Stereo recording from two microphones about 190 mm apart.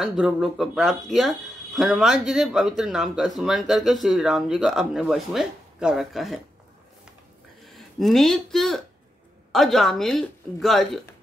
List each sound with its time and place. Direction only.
0.0 s speech: centre (ahead or behind)
7.6 s speech: centre (ahead or behind)